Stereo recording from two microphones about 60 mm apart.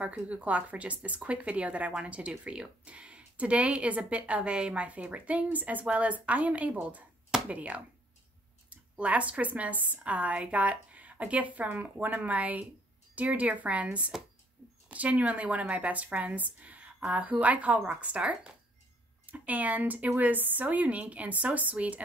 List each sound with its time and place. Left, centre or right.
0.0 s speech: right